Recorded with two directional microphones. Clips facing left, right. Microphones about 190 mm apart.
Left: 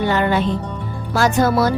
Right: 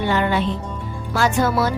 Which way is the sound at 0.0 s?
45° left (ahead or behind).